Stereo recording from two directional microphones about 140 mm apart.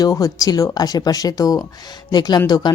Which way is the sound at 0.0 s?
25° left (ahead or behind).